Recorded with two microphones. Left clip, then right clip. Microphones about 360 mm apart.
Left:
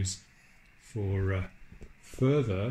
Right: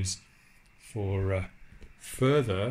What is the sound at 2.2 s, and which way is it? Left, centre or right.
Speech, right.